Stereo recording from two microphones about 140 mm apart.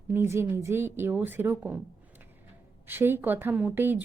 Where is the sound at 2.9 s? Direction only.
15° right (ahead or behind).